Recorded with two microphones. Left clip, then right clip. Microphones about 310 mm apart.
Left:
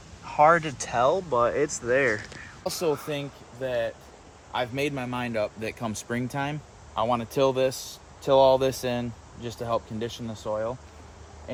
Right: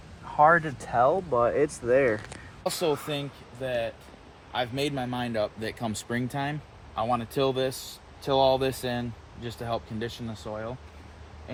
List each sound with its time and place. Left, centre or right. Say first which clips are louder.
0.3 s speech: left 1 dB; centre
8.9 s speech: left 2 dB; centre
9.5 s speech: left 4 dB; centre